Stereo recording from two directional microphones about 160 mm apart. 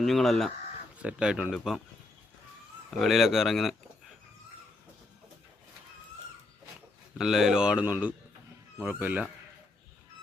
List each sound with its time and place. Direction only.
0.0 s speech: centre (ahead or behind)
3.0 s speech: centre (ahead or behind)
7.2 s speech: 5° right (ahead or behind)